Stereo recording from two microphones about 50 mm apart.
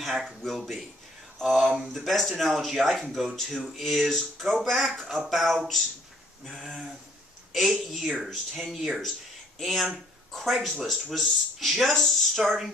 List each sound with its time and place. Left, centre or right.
0.0 s speech: centre
1.7 s speech: centre
2.0 s speech: centre
5.0 s speech: centre
5.3 s speech: centre